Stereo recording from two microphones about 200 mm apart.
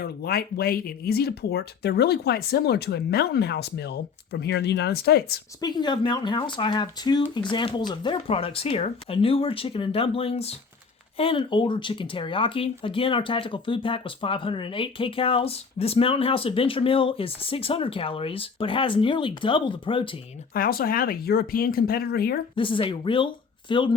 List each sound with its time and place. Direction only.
0.0 s speech: 50° left (ahead or behind)
5.5 s speech: 20° left (ahead or behind)
20.5 s speech: 45° left (ahead or behind)
22.5 s speech: 25° left (ahead or behind)